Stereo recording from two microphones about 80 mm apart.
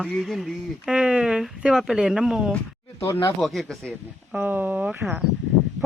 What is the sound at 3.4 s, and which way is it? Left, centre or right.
Speech, centre.